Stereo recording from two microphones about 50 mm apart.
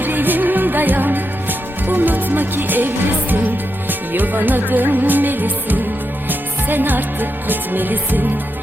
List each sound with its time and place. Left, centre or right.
0.0 s music: right